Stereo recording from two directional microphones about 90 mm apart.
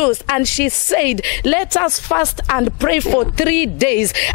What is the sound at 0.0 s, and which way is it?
Speech, 15° left (ahead or behind).